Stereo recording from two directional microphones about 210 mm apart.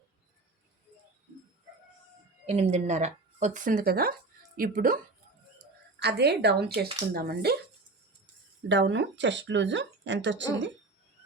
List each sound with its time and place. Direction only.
2.5 s speech: 30° right (ahead or behind)
6.0 s a woman's voice: 50° right (ahead or behind)
8.7 s speech: 60° right (ahead or behind)